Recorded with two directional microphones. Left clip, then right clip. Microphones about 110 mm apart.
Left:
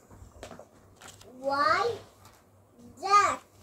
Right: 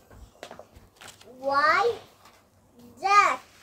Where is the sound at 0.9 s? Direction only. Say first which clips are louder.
Right 3 dB; 40° right (ahead or behind).